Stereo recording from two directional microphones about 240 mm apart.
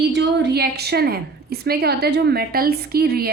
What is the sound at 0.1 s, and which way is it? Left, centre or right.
A woman's voice, right.